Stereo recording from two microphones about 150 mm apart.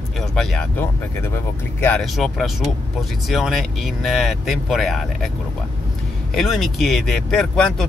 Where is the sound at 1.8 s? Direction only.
5° left (ahead or behind).